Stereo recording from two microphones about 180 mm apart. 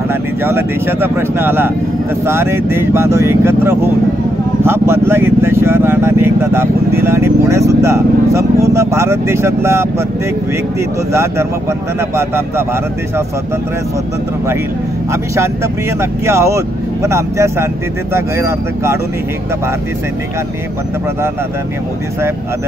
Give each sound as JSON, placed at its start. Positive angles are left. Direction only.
{"t": 0.1, "sound": "speech", "side_deg": -10}
{"t": 12.2, "sound": "speech", "side_deg": -15}
{"t": 16.0, "sound": "speech", "side_deg": -15}